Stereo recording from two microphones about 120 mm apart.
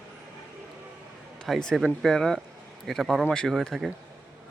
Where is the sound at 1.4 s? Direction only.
5° left (ahead or behind).